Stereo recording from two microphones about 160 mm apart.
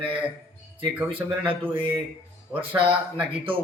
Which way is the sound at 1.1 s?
10° right (ahead or behind).